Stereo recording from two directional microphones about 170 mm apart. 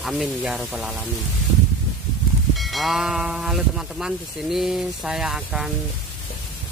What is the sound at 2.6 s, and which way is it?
Speech, centre (ahead or behind).